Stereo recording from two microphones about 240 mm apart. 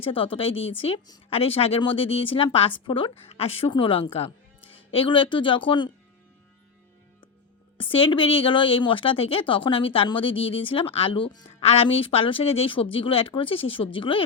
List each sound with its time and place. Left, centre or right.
0.0 s a woman's voice: left
7.8 s a woman's voice: left